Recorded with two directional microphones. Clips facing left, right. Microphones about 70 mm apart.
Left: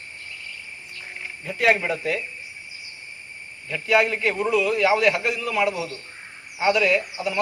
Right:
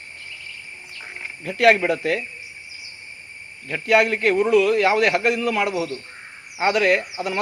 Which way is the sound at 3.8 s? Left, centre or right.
Right.